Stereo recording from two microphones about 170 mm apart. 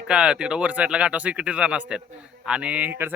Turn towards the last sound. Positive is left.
turn(degrees=-10)  # may be behind; listen again after turning